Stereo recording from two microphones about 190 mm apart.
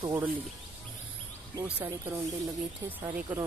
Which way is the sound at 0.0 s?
15° right (ahead or behind).